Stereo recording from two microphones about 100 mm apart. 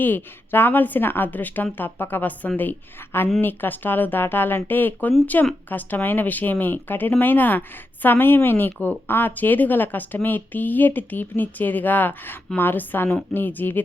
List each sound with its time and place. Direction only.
0.0 s a woman's voice: 20° left (ahead or behind)